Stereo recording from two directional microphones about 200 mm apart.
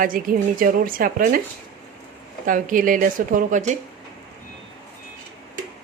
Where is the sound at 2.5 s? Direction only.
40° right (ahead or behind).